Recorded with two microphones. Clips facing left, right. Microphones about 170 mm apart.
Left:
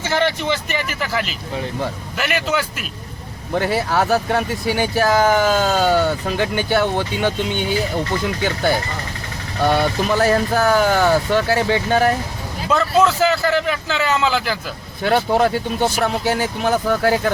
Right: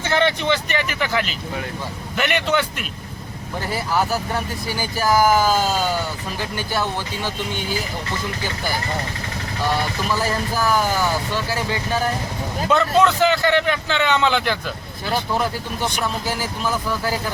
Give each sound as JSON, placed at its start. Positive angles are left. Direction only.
{"t": 0.0, "sound": "a man's voice", "side_deg": 5}
{"t": 3.6, "sound": "speech", "side_deg": 70}
{"t": 9.6, "sound": "speech", "side_deg": 65}
{"t": 12.7, "sound": "a man's voice", "side_deg": 5}
{"t": 15.0, "sound": "speech", "side_deg": 65}